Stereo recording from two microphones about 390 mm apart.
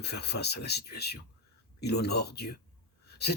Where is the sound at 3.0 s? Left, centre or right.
Left.